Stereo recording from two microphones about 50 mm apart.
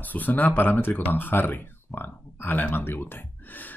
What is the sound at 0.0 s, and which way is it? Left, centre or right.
Speech, left.